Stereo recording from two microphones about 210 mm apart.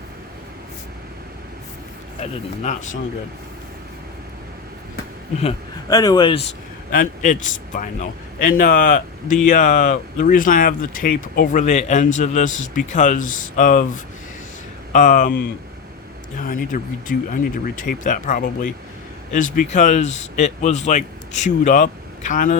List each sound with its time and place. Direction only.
2.2 s speech: 35° left (ahead or behind)
5.9 s speech: 15° left (ahead or behind)
6.9 s speech: 40° left (ahead or behind)
16.4 s speech: 40° left (ahead or behind)